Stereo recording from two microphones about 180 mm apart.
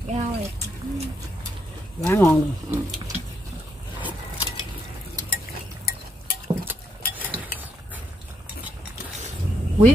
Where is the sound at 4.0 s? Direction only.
10° right (ahead or behind).